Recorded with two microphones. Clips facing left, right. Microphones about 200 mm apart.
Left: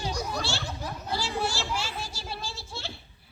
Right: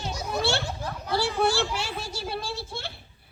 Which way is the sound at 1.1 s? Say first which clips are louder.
Right 7 dB; 60° right (ahead or behind).